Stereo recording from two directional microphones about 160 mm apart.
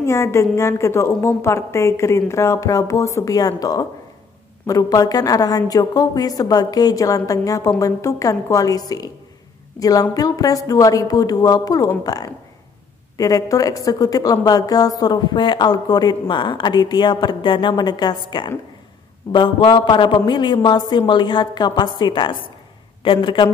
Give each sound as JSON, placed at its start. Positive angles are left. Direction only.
{"t": 0.0, "sound": "a woman's voice", "side_deg": 15}